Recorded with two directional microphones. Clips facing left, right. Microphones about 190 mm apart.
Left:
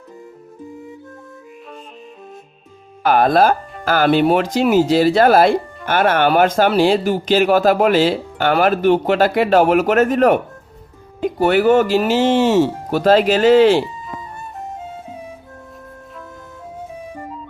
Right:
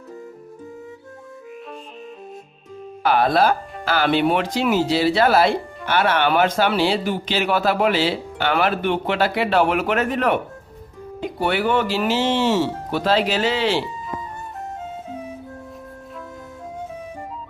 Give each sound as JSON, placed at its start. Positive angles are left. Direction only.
{"t": 3.0, "sound": "speech", "side_deg": 50}